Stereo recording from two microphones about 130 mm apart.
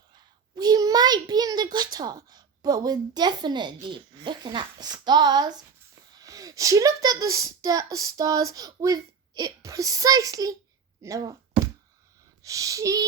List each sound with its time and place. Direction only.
0.5 s a child's voice: 30° right (ahead or behind)
12.4 s speech: 25° right (ahead or behind)